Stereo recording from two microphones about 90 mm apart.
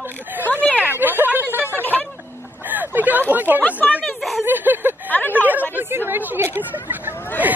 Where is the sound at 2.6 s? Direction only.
20° right (ahead or behind).